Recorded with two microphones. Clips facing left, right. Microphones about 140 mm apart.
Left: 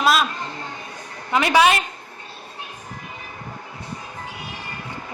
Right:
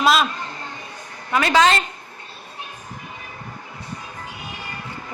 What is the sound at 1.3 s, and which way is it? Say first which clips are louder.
Speech: even; 20° left (ahead or behind).